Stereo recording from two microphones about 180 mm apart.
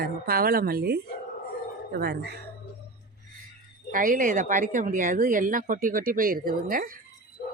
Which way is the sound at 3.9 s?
50° right (ahead or behind).